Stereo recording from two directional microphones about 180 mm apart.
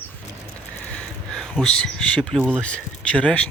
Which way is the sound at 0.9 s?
5° left (ahead or behind).